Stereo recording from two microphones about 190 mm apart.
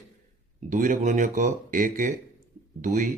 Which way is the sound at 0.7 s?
45° right (ahead or behind).